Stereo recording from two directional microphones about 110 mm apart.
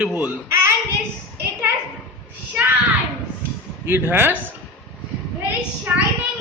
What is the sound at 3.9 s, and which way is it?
Speech, 20° right (ahead or behind).